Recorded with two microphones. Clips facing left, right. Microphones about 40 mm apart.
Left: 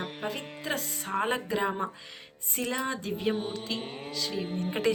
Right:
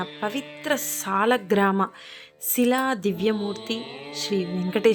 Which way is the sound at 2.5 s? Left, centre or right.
Right.